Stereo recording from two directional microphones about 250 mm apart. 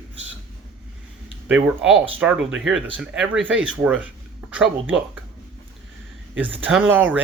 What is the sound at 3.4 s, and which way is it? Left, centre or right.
Speech, right.